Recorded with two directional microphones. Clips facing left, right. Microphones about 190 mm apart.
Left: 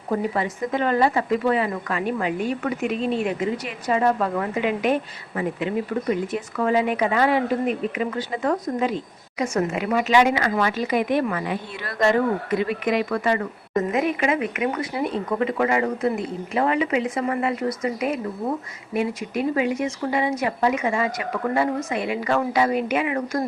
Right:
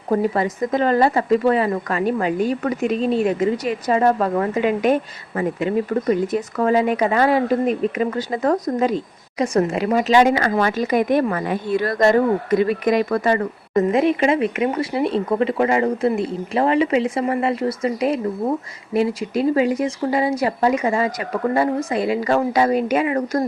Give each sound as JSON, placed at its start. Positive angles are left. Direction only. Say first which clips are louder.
{"t": 0.1, "sound": "speech", "louder": "right 5 dB", "side_deg": -40}